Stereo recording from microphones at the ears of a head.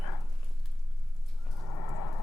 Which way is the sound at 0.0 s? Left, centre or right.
Left.